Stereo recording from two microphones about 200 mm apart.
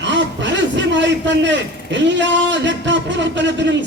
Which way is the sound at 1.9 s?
60° right (ahead or behind).